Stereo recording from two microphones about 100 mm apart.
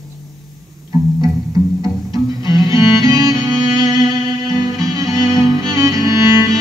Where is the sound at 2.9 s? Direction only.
35° right (ahead or behind).